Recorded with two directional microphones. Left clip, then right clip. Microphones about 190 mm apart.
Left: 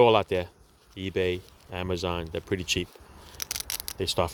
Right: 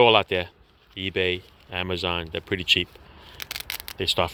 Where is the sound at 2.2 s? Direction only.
15° left (ahead or behind).